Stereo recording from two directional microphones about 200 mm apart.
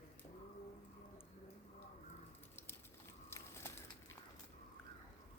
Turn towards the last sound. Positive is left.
turn(degrees=10)  # may be behind; listen again after turning